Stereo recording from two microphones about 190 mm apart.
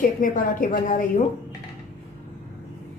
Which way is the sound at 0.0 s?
45° left (ahead or behind).